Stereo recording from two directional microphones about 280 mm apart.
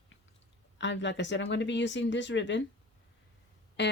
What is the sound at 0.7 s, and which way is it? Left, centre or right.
Speech, left.